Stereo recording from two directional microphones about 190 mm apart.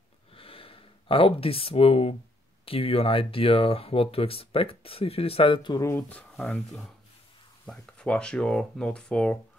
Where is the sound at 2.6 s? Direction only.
30° left (ahead or behind).